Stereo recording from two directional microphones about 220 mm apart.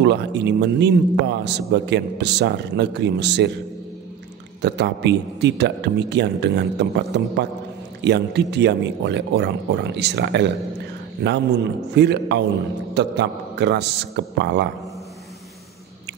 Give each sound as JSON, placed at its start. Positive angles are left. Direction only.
{"t": 0.0, "sound": "a man's voice", "side_deg": -50}
{"t": 4.6, "sound": "a man's voice", "side_deg": -50}